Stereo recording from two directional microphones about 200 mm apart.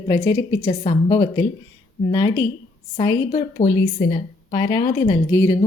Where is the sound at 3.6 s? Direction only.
30° left (ahead or behind).